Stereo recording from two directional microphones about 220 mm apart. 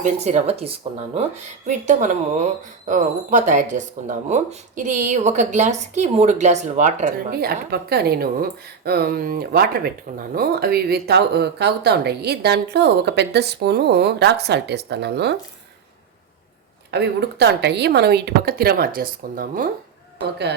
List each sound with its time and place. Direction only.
0.0 s a woman's voice: 30° right (ahead or behind); by 15.4 s 50° right (ahead or behind)
16.9 s speech: 50° right (ahead or behind)